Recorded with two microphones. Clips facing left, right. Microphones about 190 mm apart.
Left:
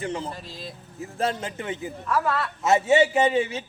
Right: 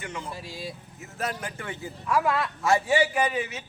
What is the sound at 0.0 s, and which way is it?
A man's voice, 30° left (ahead or behind).